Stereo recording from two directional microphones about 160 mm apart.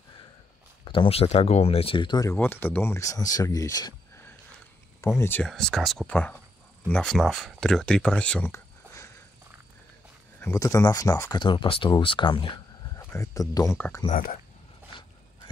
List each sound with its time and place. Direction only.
0.8 s speech: 35° left (ahead or behind)
2.3 s speech: 10° left (ahead or behind)
5.0 s speech: 15° left (ahead or behind)
5.5 s speech: centre (ahead or behind)
10.4 s speech: 20° left (ahead or behind)
11.3 s speech: 30° left (ahead or behind)
13.1 s speech: 20° left (ahead or behind)
14.1 s speech: 60° left (ahead or behind)